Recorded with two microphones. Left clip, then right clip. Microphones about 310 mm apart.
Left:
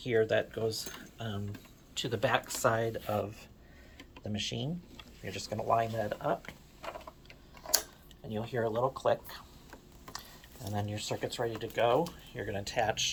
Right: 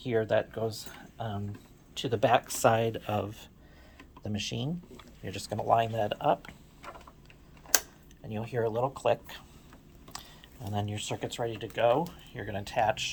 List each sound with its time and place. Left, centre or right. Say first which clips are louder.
0.0 s speech: right 1 dB; right
7.6 s a sound: right 3 dB; centre
8.3 s speech: right 2 dB; right